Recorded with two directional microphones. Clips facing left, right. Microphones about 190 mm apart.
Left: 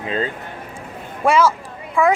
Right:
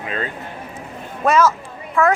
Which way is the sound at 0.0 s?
25° left (ahead or behind).